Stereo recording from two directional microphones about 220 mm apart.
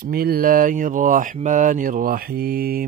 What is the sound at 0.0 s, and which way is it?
Speech, 45° right (ahead or behind).